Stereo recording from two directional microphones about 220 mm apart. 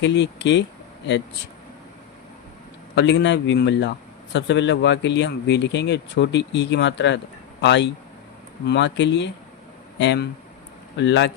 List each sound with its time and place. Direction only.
0.0 s a man's voice: 50° left (ahead or behind)
2.9 s a man's voice: 50° left (ahead or behind)